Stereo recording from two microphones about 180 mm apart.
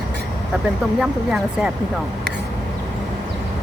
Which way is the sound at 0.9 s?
5° right (ahead or behind).